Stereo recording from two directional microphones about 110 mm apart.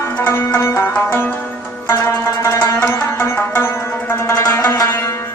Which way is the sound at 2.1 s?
25° left (ahead or behind).